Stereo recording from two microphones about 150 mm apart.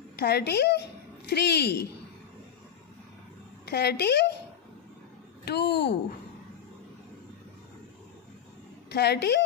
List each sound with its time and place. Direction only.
0.2 s speech: 90° left
3.7 s speech: 90° left
5.4 s a woman's voice: 90° left
8.9 s speech: 90° left